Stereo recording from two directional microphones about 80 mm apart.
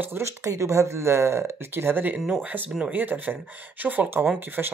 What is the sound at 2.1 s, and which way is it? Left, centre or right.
Speech, centre.